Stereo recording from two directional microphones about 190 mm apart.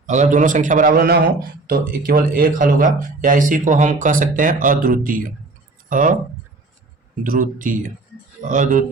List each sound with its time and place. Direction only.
0.0 s a man's voice: 40° right (ahead or behind)
7.3 s a man's voice: 45° right (ahead or behind)